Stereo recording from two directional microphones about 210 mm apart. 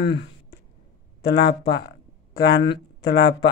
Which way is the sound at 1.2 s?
50° left (ahead or behind).